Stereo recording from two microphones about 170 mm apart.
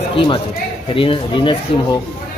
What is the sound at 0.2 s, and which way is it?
A man's voice, 30° left (ahead or behind).